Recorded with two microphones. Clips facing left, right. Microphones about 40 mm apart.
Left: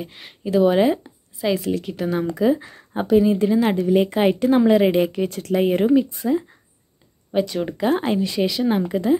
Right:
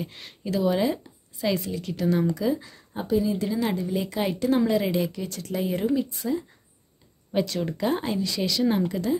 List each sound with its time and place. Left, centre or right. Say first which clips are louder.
0.0 s speech: left 4 dB; centre
0.6 s a woman's voice: left 8 dB; left
1.9 s speech: left 1 dB; centre
2.3 s a woman's voice: left 7 dB; left
3.7 s a woman's voice: left 9 dB; left
6.0 s speech: left 6 dB; left
7.3 s speech: left 4 dB; centre
7.9 s a woman's voice: left 6 dB; left
8.5 s speech: left 3 dB; left